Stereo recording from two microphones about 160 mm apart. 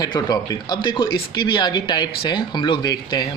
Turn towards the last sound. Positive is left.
turn(degrees=25)  # may be behind; listen again after turning